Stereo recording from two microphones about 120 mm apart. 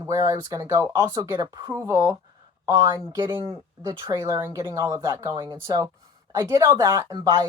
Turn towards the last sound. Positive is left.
turn(degrees=-35)  # may be behind; listen again after turning